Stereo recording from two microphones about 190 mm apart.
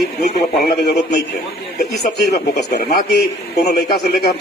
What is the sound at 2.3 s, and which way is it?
Speech, 60° left (ahead or behind).